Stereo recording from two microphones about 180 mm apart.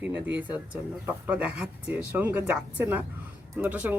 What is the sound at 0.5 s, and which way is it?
Speech, 5° right (ahead or behind).